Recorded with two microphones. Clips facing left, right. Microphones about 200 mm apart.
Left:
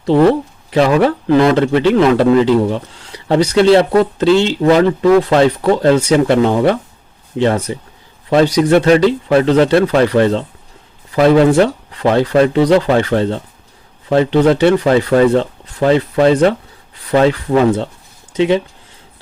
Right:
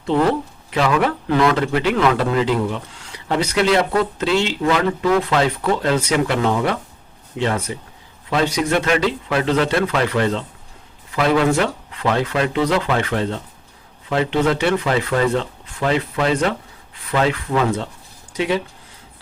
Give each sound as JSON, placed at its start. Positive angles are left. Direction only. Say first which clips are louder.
{"t": 0.7, "sound": "a man's voice", "louder": "left 7 dB", "side_deg": 35}